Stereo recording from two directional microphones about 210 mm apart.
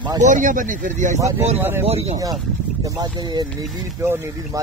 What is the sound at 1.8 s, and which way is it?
Speech, 30° right (ahead or behind).